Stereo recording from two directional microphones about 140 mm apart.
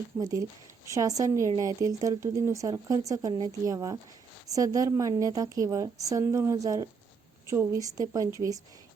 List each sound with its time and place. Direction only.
0.2 s a woman's voice: 25° right (ahead or behind)